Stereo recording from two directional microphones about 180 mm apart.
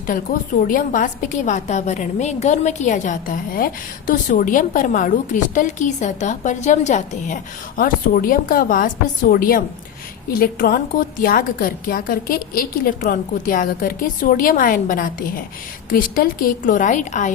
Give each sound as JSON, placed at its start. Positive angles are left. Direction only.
{"t": 0.1, "sound": "a woman's voice", "side_deg": 50}